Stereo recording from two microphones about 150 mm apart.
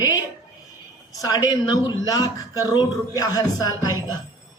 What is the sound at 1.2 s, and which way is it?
A man's voice, 25° left (ahead or behind).